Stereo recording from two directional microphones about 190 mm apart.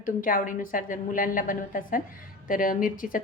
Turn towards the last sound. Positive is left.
turn(degrees=45)  # may be behind; listen again after turning